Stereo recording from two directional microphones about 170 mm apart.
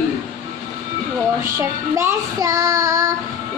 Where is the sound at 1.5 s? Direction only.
20° right (ahead or behind).